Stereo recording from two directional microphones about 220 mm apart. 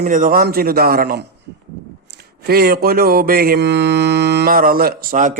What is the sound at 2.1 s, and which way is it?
Mantra, 45° right (ahead or behind).